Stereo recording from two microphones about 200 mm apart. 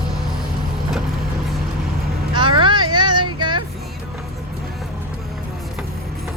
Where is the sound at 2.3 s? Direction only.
25° right (ahead or behind).